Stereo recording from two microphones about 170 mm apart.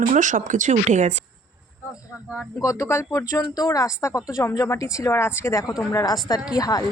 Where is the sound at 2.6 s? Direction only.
20° left (ahead or behind).